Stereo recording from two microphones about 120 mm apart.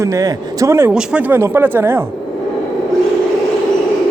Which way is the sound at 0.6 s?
25° right (ahead or behind).